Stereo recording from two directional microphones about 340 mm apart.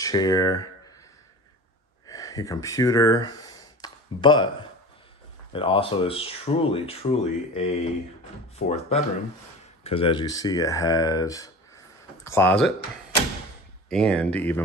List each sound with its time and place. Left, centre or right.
0.0 s speech: centre
2.0 s speech: centre
13.8 s speech: centre